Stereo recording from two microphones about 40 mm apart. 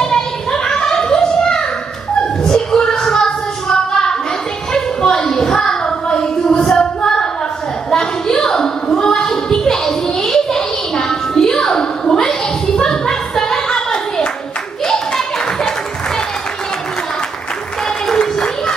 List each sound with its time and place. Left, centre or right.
0.0 s a sound: centre
13.7 s hands: centre
14.9 s clapping: centre
18.0 s clapping: centre